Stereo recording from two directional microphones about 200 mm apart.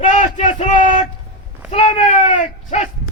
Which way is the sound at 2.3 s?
35° left (ahead or behind).